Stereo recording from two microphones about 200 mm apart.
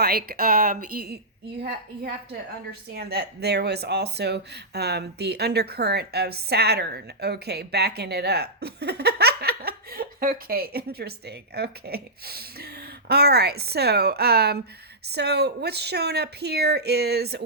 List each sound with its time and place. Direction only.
0.0 s speech: 50° right (ahead or behind)
2.9 s speech: 55° right (ahead or behind)